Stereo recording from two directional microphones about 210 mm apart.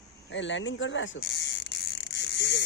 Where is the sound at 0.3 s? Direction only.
60° left (ahead or behind).